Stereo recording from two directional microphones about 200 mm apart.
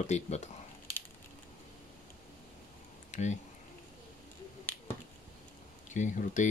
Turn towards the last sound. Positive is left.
turn(degrees=40)  # may be behind; listen again after turning